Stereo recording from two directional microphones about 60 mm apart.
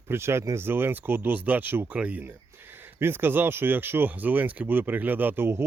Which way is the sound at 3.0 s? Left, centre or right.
Right.